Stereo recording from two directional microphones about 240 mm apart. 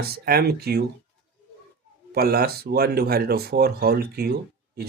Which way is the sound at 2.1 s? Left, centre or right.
Right.